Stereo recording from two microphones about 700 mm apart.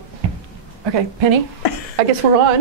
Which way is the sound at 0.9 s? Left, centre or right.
Right.